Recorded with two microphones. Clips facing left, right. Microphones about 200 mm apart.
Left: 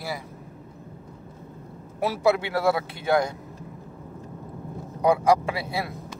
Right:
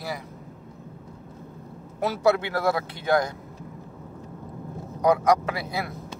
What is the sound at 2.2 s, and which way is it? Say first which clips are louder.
Speech: even; 25° left (ahead or behind).